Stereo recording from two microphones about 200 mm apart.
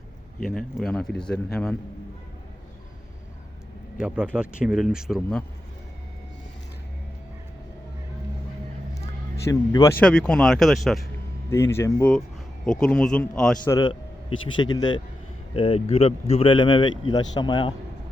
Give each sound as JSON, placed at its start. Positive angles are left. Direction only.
{"t": 0.3, "sound": "speech", "side_deg": 0}
{"t": 3.9, "sound": "speech", "side_deg": -5}
{"t": 9.5, "sound": "speech", "side_deg": 20}
{"t": 10.0, "sound": "speech", "side_deg": 5}
{"t": 11.5, "sound": "speech", "side_deg": 15}
{"t": 12.6, "sound": "speech", "side_deg": 5}
{"t": 13.7, "sound": "speech", "side_deg": 20}